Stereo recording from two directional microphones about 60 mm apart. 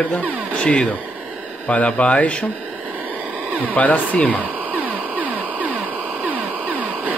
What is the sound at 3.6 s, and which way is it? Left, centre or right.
Speech, left.